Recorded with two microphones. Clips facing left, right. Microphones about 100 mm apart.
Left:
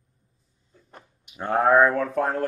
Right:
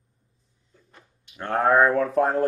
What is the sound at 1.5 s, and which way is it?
Speech, centre (ahead or behind).